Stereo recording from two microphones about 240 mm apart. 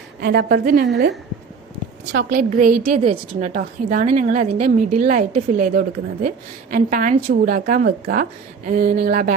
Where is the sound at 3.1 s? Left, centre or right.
Right.